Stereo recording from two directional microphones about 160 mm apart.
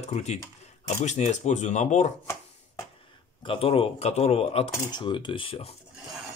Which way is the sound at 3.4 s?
35° left (ahead or behind).